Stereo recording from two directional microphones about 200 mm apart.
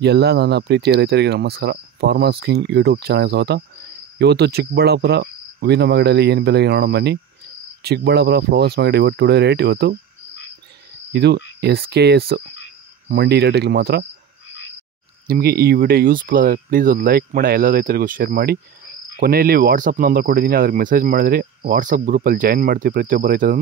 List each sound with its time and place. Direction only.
0.0 s speech: 55° right (ahead or behind)
11.1 s speech: 55° right (ahead or behind)
15.2 s speech: 50° right (ahead or behind)